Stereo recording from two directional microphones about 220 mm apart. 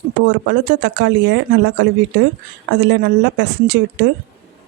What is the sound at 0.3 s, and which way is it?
Speech, 50° right (ahead or behind).